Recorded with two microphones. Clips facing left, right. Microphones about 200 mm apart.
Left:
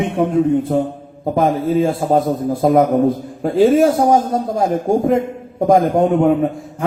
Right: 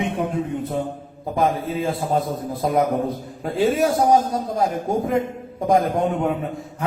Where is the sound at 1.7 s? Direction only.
45° left (ahead or behind).